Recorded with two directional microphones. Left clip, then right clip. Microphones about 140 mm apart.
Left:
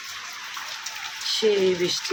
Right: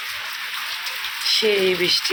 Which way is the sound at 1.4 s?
20° left (ahead or behind).